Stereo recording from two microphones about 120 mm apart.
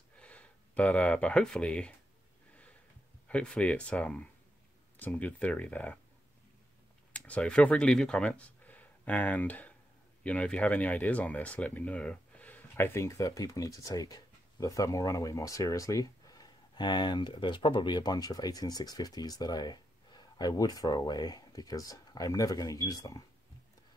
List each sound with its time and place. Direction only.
0.2 s speech: 10° left (ahead or behind)
3.3 s speech: 10° left (ahead or behind)
7.1 s speech: 10° left (ahead or behind); by 23.2 s 30° left (ahead or behind)